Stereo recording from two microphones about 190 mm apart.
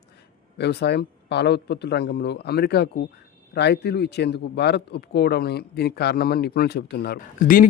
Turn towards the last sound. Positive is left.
turn(degrees=50)  # may be behind; listen again after turning